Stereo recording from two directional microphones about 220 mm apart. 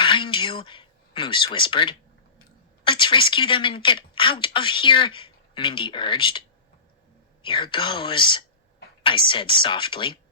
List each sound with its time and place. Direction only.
0.0 s a sound: 20° left (ahead or behind)
2.8 s a woman's voice: 20° left (ahead or behind)
7.4 s a woman's voice: 20° left (ahead or behind)